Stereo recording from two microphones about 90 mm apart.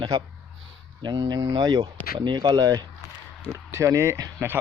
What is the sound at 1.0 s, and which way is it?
Speech, 50° right (ahead or behind).